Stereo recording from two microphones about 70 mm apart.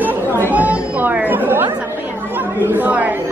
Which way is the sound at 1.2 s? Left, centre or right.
Right.